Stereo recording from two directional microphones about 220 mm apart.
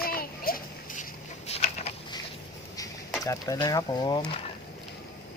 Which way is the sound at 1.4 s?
30° left (ahead or behind).